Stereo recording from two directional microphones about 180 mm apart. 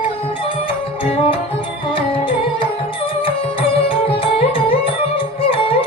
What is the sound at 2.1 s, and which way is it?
Music, 30° left (ahead or behind).